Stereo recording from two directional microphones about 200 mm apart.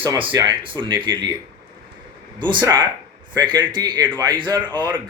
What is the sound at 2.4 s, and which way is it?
Speech, 25° right (ahead or behind).